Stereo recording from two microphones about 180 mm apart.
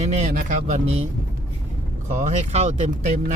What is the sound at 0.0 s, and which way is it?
Speech, 40° right (ahead or behind).